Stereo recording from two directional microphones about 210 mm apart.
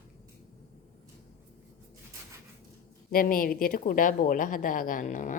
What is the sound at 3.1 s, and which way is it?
A woman's voice, 40° left (ahead or behind).